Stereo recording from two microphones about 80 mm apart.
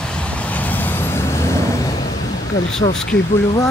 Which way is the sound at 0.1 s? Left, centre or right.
Centre.